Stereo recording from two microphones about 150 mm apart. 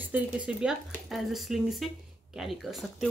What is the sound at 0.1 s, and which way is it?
A woman's voice, 10° right (ahead or behind).